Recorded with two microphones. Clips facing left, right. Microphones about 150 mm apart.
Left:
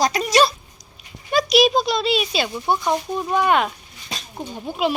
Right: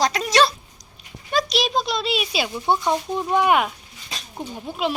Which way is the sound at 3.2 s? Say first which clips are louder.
Even; 15° right (ahead or behind).